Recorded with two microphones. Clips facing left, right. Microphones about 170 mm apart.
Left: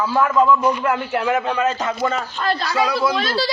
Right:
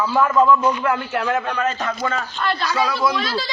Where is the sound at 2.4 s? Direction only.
40° left (ahead or behind).